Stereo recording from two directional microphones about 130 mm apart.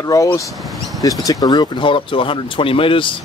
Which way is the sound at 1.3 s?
35° left (ahead or behind).